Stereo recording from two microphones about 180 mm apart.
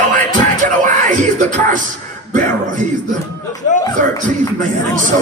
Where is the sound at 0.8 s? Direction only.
45° right (ahead or behind).